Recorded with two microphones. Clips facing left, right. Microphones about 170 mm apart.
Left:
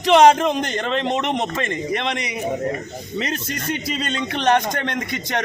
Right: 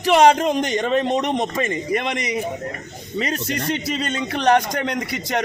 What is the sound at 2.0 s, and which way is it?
Speech, 65° left (ahead or behind).